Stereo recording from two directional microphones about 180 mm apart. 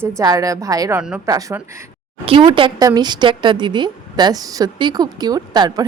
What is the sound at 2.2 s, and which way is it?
A woman's voice, 30° right (ahead or behind).